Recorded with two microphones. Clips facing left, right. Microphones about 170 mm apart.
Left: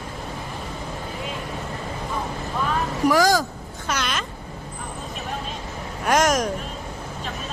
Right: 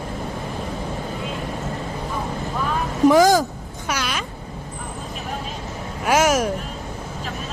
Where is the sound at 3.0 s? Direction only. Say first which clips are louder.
Right 5 dB; 20° right (ahead or behind).